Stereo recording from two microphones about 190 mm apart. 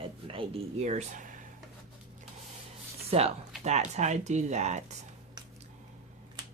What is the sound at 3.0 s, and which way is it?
Speech, 30° right (ahead or behind).